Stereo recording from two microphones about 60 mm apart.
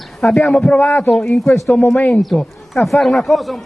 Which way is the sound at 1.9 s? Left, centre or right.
Left.